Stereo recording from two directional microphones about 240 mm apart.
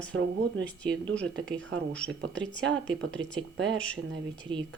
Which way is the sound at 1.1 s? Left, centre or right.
Centre.